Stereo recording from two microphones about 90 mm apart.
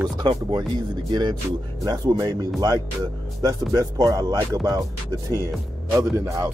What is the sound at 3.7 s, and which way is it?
Speech, 45° right (ahead or behind).